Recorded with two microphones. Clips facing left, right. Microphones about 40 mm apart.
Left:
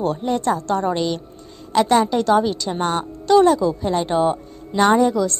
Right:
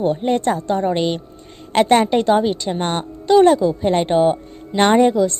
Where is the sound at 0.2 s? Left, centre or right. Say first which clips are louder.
Right 2 dB; right.